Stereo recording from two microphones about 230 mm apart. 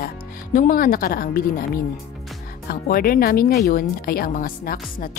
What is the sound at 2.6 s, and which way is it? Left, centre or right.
Speech, left.